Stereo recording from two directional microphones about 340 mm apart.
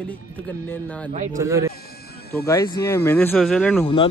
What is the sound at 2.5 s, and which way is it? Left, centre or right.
Speech, centre.